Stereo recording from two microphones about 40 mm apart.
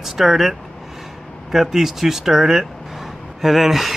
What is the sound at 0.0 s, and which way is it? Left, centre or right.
Speech, centre.